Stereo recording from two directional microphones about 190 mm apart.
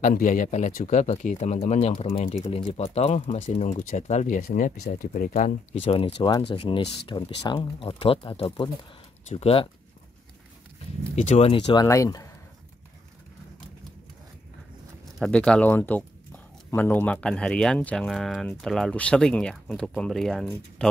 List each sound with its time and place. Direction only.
0.0 s speech: 45° left (ahead or behind)
11.1 s speech: 35° left (ahead or behind); by 12.3 s 15° left (ahead or behind)
15.1 s speech: 5° left (ahead or behind)